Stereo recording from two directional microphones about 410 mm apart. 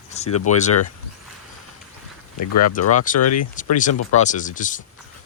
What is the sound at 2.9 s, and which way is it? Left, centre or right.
Speech, centre.